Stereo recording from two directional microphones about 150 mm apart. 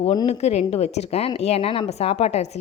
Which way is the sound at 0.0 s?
35° left (ahead or behind).